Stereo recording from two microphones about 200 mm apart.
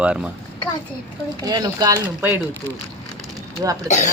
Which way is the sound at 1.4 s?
20° right (ahead or behind).